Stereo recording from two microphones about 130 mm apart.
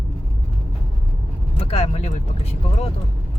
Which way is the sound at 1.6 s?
50° left (ahead or behind).